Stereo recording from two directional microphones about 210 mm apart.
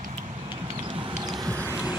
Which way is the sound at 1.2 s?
15° right (ahead or behind).